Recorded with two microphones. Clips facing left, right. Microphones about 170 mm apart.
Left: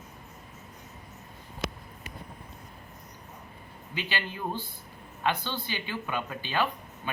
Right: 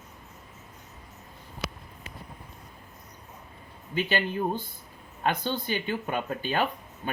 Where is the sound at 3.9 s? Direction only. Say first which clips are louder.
Right 7 dB; 45° right (ahead or behind).